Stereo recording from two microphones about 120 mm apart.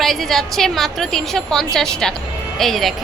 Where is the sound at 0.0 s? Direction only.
Centre (ahead or behind).